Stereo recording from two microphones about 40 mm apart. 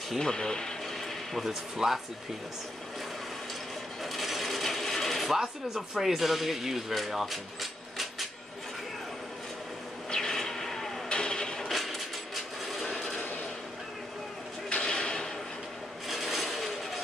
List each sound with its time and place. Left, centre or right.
0.2 s speech: centre
1.3 s speech: centre
4.0 s coin: centre
5.4 s speech: centre
10.1 s vehicle: centre
11.7 s a sound: centre
14.7 s a sound: centre
16.1 s vehicle: centre